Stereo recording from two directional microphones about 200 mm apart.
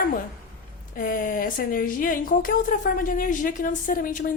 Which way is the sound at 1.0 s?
40° left (ahead or behind).